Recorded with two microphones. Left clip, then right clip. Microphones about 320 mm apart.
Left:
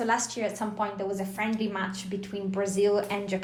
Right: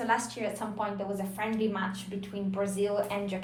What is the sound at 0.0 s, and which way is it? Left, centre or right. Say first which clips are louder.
Speech: left 2 dB; left.